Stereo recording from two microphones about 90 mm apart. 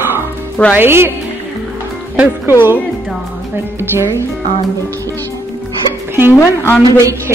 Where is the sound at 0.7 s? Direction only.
25° right (ahead or behind).